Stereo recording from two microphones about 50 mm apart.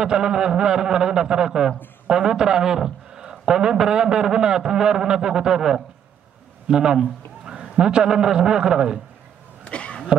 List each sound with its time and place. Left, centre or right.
0.0 s a man's voice: centre
9.7 s cough: left